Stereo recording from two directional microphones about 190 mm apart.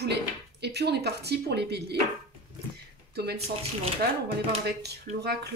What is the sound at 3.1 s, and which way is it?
Speech, 55° right (ahead or behind).